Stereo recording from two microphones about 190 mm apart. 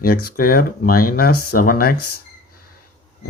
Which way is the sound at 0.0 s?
50° left (ahead or behind).